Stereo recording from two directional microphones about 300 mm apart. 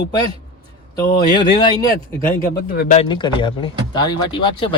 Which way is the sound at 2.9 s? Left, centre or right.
Centre.